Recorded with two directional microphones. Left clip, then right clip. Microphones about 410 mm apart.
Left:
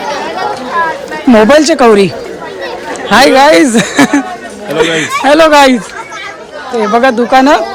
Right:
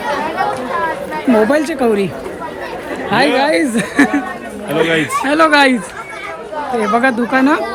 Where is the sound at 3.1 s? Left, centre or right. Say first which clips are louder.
Left 9 dB; centre.